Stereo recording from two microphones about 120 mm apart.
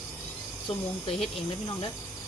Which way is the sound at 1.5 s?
40° left (ahead or behind).